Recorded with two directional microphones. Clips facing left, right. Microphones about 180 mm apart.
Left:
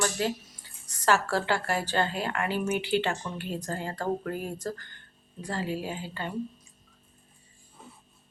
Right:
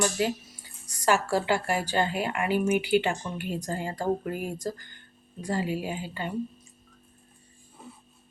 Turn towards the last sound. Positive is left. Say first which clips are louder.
# right 2 dB
turn(degrees=-15)  # may be behind; listen again after turning